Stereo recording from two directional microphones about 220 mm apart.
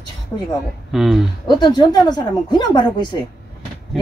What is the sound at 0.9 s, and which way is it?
Speech, centre (ahead or behind).